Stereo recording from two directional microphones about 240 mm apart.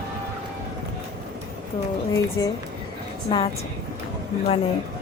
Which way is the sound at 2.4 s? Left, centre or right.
Centre.